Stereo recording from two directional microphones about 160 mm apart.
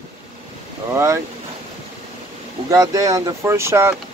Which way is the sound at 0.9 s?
20° right (ahead or behind).